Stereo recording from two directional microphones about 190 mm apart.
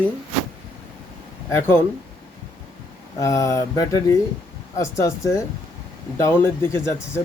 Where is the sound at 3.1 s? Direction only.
15° left (ahead or behind).